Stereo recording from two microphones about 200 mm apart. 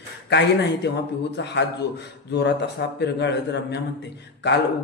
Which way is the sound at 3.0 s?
60° left (ahead or behind).